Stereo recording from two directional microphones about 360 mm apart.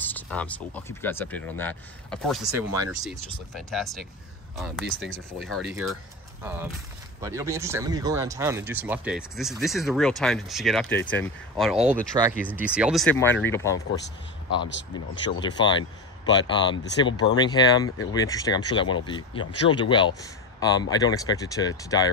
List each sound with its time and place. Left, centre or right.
0.0 s speech: centre
7.2 s speech: centre
14.7 s speech: left
15.4 s speech: centre